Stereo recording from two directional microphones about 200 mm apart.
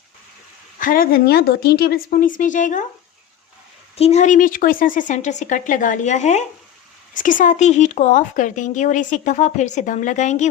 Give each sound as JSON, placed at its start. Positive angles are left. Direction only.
{"t": 0.8, "sound": "a woman's voice", "side_deg": 45}
{"t": 3.9, "sound": "speech", "side_deg": 30}